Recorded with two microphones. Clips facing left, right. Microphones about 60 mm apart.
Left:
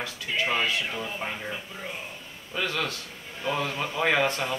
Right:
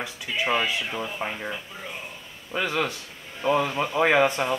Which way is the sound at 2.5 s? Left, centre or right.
Right.